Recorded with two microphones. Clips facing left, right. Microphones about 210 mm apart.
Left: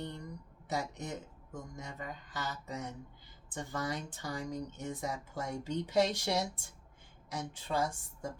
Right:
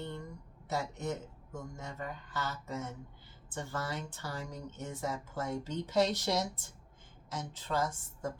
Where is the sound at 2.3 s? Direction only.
15° left (ahead or behind).